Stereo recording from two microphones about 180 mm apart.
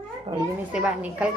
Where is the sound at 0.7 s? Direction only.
10° right (ahead or behind).